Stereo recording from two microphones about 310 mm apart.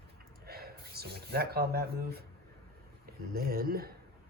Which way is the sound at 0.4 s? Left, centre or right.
Right.